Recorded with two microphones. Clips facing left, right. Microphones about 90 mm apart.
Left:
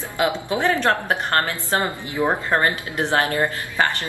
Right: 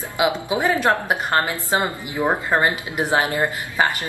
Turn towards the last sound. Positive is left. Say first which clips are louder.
# right 1 dB
turn(degrees=-15)  # may be behind; listen again after turning